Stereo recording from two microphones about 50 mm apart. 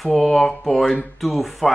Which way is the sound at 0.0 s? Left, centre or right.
Centre.